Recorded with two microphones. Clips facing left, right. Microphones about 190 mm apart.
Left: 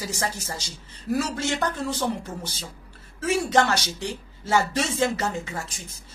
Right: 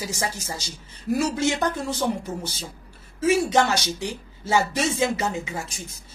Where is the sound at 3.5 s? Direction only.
10° right (ahead or behind).